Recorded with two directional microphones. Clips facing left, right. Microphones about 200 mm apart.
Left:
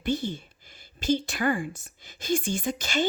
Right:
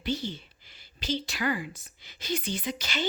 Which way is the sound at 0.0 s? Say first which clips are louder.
Left 4 dB; 50° left (ahead or behind).